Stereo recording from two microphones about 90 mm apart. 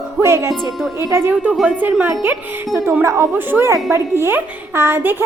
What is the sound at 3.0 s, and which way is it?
Speech, 35° right (ahead or behind).